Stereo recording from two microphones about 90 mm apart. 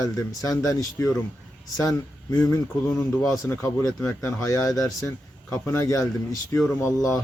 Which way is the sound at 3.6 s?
35° left (ahead or behind).